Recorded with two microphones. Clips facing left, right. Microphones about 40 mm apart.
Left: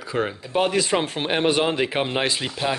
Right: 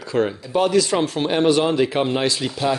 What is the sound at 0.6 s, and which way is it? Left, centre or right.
A man's voice, left.